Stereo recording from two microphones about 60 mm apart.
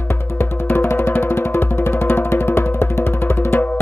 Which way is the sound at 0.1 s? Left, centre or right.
Left.